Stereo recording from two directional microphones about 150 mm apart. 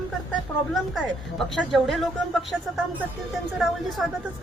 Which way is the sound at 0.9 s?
Centre (ahead or behind).